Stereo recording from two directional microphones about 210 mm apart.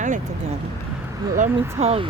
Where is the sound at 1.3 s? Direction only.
35° right (ahead or behind).